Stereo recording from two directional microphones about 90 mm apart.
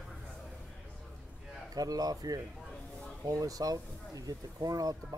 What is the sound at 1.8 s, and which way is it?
Speech, 45° right (ahead or behind).